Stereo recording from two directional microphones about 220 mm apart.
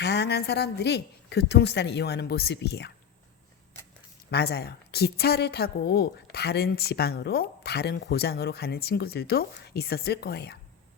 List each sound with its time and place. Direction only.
0.0 s a woman's voice: 50° left (ahead or behind)
4.3 s a woman's voice: 50° left (ahead or behind)